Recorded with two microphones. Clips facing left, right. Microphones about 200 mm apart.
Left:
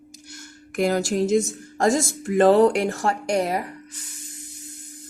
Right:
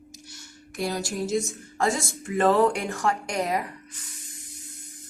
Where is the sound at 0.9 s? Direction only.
80° left.